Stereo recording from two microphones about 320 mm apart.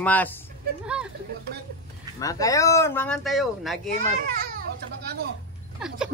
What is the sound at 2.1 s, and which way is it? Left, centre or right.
Speech, centre.